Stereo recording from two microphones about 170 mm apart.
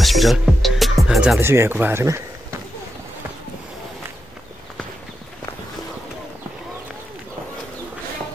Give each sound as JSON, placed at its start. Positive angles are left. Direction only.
{"t": 0.0, "sound": "music", "side_deg": 0}
{"t": 1.4, "sound": "speech", "side_deg": -15}